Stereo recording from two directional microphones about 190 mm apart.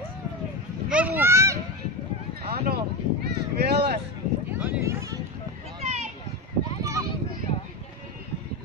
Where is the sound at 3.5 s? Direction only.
60° right (ahead or behind).